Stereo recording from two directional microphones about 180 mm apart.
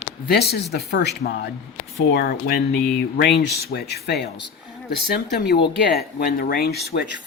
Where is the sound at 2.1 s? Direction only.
60° left (ahead or behind).